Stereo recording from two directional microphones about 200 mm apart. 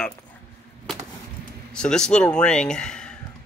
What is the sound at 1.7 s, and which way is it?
Speech, 5° left (ahead or behind).